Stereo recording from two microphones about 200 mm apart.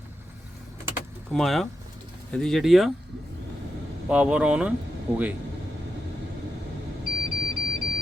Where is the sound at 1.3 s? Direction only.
Centre (ahead or behind).